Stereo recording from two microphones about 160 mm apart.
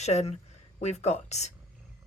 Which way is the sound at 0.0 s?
45° left (ahead or behind).